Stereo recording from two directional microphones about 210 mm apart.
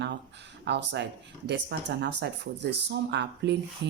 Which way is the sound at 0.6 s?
55° right (ahead or behind).